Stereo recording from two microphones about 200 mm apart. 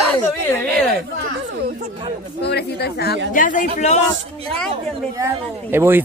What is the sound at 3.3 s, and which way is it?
Speech, 40° left (ahead or behind).